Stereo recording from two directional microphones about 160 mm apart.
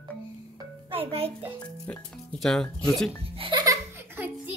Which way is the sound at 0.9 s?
40° right (ahead or behind).